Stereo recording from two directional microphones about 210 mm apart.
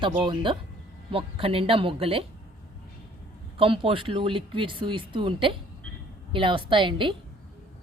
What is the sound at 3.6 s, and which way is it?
Speech, 25° right (ahead or behind).